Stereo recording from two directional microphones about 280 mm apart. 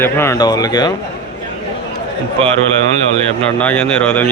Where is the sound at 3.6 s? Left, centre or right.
Centre.